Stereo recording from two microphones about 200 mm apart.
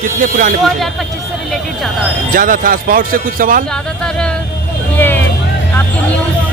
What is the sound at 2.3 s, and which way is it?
Speech, 45° right (ahead or behind).